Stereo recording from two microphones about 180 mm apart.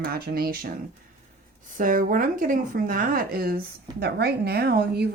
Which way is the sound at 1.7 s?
50° right (ahead or behind).